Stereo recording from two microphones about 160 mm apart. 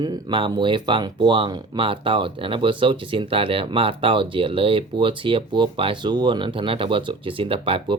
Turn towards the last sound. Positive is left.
turn(degrees=-30)  # may be behind; listen again after turning